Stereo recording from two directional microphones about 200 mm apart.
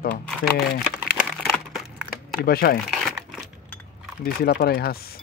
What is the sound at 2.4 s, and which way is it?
Speech, 50° left (ahead or behind).